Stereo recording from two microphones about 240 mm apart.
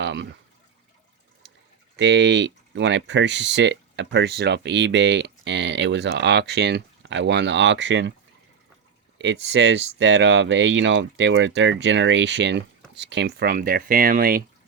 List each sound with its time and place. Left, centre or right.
0.0 s a sound: right
2.0 s speech: right
9.1 s speech: right